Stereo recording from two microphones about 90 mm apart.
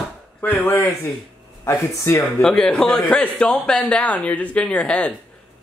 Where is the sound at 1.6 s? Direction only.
30° left (ahead or behind).